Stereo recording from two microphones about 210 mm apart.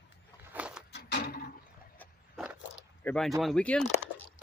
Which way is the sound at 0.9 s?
55° left (ahead or behind).